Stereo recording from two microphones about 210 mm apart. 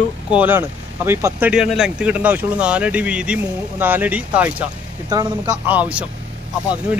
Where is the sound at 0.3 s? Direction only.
10° right (ahead or behind).